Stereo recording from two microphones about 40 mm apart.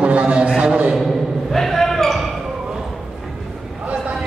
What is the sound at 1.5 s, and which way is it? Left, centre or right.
Basketball bounce, centre.